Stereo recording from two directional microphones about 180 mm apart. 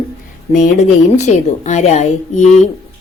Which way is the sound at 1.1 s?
40° left (ahead or behind).